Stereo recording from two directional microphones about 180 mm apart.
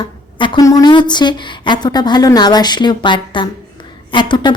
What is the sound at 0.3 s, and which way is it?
Speech, 25° left (ahead or behind).